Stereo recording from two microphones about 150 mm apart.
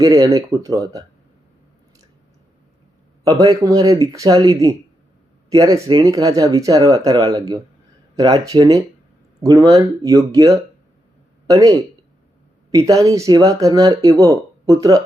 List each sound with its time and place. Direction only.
0.0 s speech: 20° right (ahead or behind)
3.2 s speech: 25° right (ahead or behind)
11.4 s speech: 25° right (ahead or behind)